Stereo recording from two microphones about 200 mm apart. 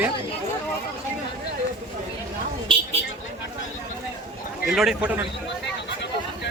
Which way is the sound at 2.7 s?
25° right (ahead or behind).